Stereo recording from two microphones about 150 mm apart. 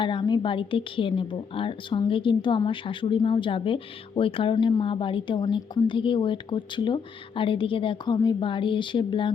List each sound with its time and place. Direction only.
0.0 s a woman's voice: 30° left (ahead or behind)